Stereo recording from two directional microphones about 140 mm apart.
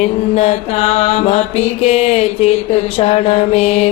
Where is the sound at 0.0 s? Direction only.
50° left (ahead or behind).